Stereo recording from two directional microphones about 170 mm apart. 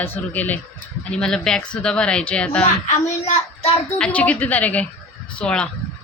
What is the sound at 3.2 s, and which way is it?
Child singing, 40° left (ahead or behind).